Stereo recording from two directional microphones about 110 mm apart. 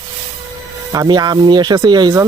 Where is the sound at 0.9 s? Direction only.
40° right (ahead or behind).